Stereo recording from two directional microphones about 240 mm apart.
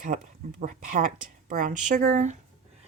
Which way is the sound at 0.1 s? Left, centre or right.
Right.